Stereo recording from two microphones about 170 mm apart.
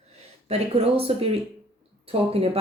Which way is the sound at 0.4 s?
35° right (ahead or behind).